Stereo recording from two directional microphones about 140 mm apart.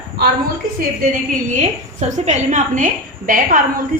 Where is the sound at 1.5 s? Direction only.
55° right (ahead or behind).